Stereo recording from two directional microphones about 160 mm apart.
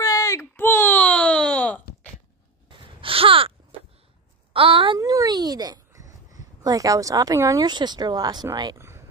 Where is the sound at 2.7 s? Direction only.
35° right (ahead or behind).